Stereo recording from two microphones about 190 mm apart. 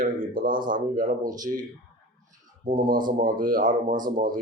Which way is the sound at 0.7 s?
45° right (ahead or behind).